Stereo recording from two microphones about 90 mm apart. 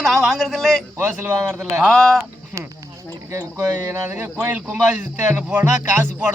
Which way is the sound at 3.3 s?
35° right (ahead or behind).